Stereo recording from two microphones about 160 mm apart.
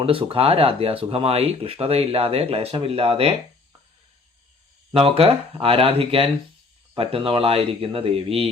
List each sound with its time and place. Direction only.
0.0 s speech: 35° right (ahead or behind)
4.9 s speech: 35° right (ahead or behind)